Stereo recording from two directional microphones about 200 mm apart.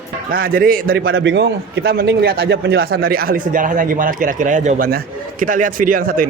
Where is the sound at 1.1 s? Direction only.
60° right (ahead or behind).